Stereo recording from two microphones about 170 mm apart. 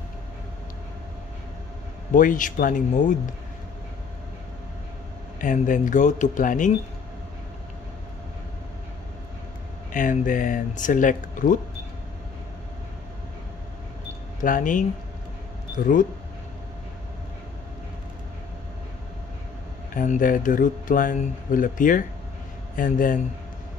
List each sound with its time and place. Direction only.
2.1 s speech: 50° left (ahead or behind)
5.4 s speech: 50° left (ahead or behind)
9.9 s speech: 50° left (ahead or behind)
14.4 s speech: 50° left (ahead or behind)
19.9 s speech: 50° left (ahead or behind)